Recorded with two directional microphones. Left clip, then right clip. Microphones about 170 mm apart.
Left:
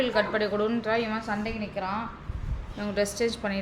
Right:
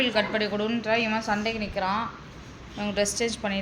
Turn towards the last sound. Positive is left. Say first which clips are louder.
# even
turn(degrees=10)  # may be behind; listen again after turning